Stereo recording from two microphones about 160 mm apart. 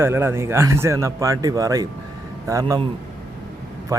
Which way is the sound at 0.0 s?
15° right (ahead or behind).